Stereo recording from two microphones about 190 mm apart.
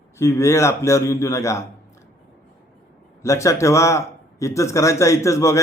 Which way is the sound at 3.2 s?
15° left (ahead or behind).